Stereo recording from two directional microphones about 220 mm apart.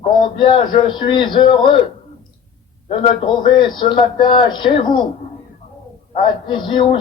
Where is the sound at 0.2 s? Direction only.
20° left (ahead or behind).